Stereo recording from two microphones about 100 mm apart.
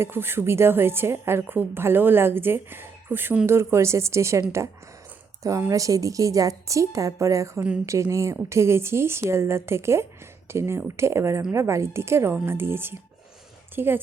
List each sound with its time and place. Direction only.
0.0 s a woman's voice: 25° right (ahead or behind)